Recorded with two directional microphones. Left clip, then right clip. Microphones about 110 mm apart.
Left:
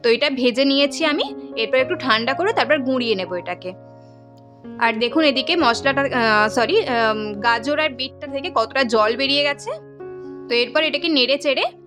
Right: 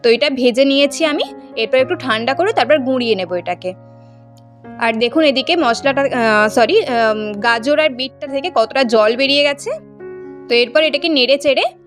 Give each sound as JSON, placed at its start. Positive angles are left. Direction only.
{"t": 0.0, "sound": "speech", "side_deg": -35}
{"t": 4.8, "sound": "speech", "side_deg": -35}
{"t": 6.2, "sound": "speech", "side_deg": -45}